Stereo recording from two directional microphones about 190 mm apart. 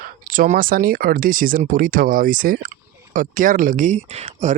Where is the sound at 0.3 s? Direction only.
45° right (ahead or behind).